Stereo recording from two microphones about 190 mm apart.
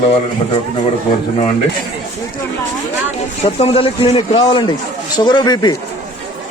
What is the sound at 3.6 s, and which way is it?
A man's voice, 30° left (ahead or behind).